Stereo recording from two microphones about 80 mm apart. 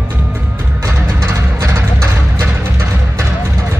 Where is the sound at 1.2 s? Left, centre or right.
Right.